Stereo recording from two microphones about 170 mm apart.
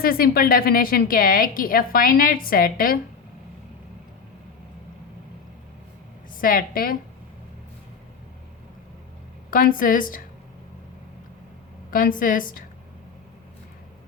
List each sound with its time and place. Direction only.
0.0 s a woman's voice: 60° left (ahead or behind)
6.4 s a woman's voice: 55° left (ahead or behind)
9.5 s a woman's voice: 55° left (ahead or behind)
11.9 s a woman's voice: 55° left (ahead or behind)